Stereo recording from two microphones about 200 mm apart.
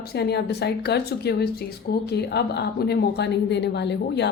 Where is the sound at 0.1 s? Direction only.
55° left (ahead or behind).